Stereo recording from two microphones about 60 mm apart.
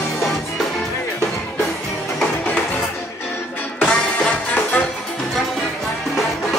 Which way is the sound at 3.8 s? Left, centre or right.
Centre.